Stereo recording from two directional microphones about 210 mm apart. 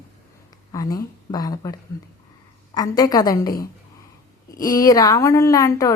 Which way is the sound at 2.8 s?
20° left (ahead or behind).